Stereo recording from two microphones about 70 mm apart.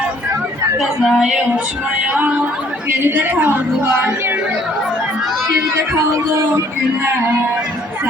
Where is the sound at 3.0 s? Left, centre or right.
Right.